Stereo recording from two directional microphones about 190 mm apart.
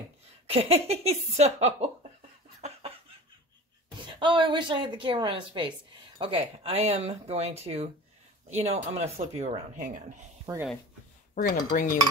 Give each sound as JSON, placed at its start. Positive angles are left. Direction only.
{"t": 0.5, "sound": "speech", "side_deg": -30}
{"t": 4.2, "sound": "a woman's voice", "side_deg": -25}
{"t": 10.5, "sound": "speech", "side_deg": -15}
{"t": 11.7, "sound": "dishes", "side_deg": 45}